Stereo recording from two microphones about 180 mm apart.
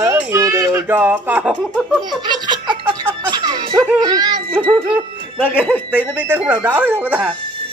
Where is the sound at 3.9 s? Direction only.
20° right (ahead or behind).